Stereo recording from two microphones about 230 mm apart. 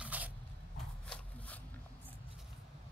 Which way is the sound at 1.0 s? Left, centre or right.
Centre.